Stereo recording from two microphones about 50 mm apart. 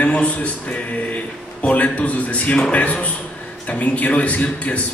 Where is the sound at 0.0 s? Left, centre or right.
Left.